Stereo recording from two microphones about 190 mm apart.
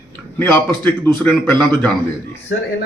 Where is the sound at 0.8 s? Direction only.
10° left (ahead or behind).